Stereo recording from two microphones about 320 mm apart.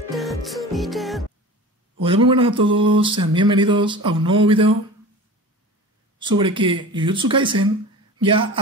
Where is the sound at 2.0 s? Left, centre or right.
Centre.